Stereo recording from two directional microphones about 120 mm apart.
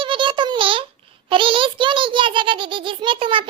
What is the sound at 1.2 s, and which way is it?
A child's voice, 45° right (ahead or behind).